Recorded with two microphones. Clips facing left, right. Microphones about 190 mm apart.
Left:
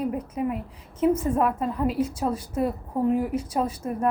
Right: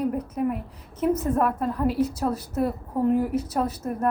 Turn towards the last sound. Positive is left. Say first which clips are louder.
# even
turn(degrees=10)  # may be behind; listen again after turning